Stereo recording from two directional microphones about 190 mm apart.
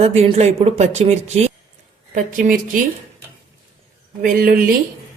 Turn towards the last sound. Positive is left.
turn(degrees=-50)  # may be behind; listen again after turning